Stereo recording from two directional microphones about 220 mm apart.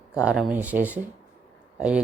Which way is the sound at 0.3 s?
5° right (ahead or behind).